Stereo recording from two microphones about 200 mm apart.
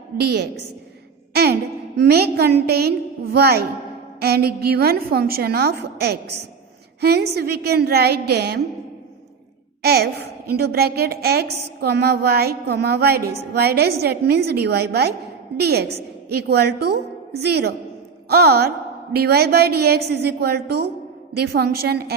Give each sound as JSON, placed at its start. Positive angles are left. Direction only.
{"t": 0.2, "sound": "a woman's voice", "side_deg": -55}
{"t": 1.3, "sound": "a sound", "side_deg": -55}
{"t": 2.0, "sound": "a woman's voice", "side_deg": -55}
{"t": 9.8, "sound": "a woman's voice", "side_deg": -50}